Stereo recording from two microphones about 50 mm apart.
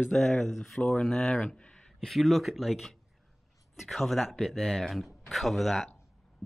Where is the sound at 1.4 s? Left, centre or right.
Centre.